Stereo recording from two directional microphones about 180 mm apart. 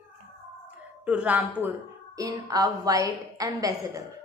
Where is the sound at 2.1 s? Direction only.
20° right (ahead or behind).